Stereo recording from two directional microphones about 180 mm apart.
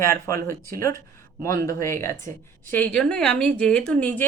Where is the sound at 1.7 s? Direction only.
15° left (ahead or behind).